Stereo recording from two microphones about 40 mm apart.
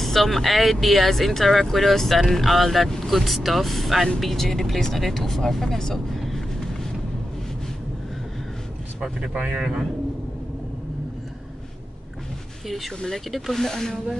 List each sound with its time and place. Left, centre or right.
0.0 s speech: centre
6.2 s a sound: centre
9.0 s speech: right
9.6 s speech: centre
12.6 s speech: centre